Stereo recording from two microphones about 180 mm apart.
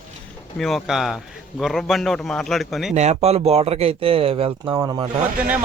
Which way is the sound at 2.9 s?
35° right (ahead or behind).